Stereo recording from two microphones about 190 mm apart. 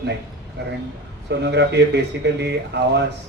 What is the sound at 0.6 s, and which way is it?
Speech, 65° right (ahead or behind).